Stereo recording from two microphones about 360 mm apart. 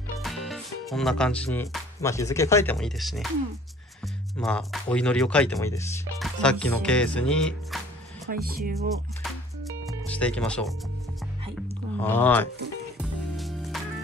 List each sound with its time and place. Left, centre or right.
0.2 s speech: centre
4.4 s speech: centre
8.3 s speech: right
10.0 s speech: centre
11.5 s a sound: centre
12.9 s music: centre